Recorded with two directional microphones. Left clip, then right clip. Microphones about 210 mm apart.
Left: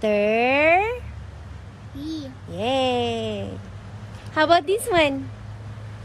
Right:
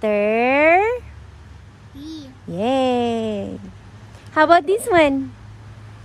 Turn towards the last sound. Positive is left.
turn(degrees=-40)  # may be behind; listen again after turning